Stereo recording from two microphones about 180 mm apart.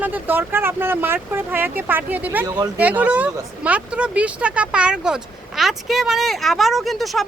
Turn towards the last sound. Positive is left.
turn(degrees=0)  # may be behind; listen again after turning